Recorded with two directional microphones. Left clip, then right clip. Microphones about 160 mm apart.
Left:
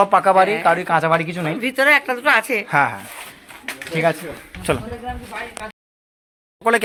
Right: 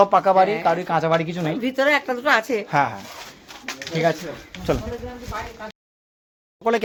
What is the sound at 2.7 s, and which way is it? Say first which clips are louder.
Speech: left 3 dB; 20° left (ahead or behind).